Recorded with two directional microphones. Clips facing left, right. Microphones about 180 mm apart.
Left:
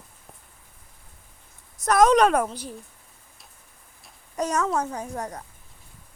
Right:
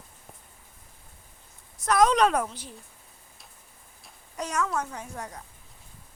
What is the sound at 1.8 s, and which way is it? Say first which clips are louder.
Speech: left 4 dB; 45° left (ahead or behind).